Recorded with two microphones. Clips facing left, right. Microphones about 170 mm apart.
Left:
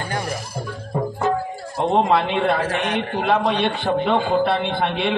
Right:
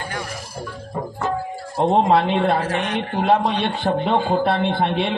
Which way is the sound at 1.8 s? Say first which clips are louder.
Right 2 dB; 40° right (ahead or behind).